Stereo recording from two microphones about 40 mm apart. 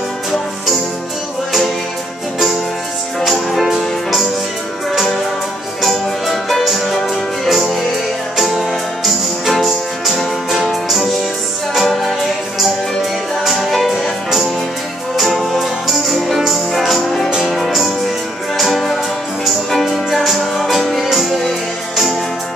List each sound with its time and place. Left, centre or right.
3.2 s music: centre
5.8 s music: centre
8.4 s music: centre
13.4 s music: centre